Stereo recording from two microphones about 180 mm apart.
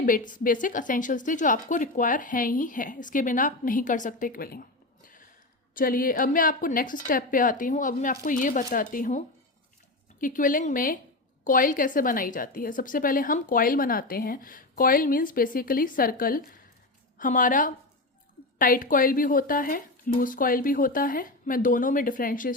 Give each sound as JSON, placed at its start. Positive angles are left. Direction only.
{"t": 0.0, "sound": "a woman's voice", "side_deg": 50}
{"t": 5.7, "sound": "a woman's voice", "side_deg": 50}